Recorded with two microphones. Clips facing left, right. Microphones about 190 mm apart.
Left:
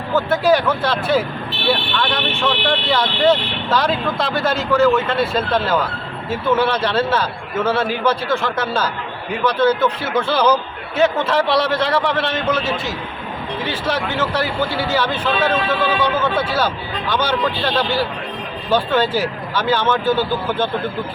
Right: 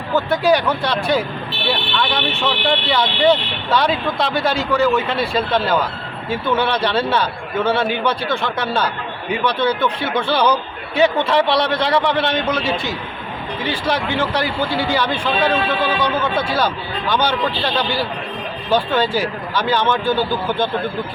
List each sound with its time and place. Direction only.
0.1 s speech: centre (ahead or behind)
18.7 s speech: 5° left (ahead or behind)